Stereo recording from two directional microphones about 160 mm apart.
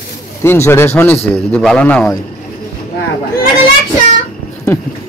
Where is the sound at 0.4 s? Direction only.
15° left (ahead or behind).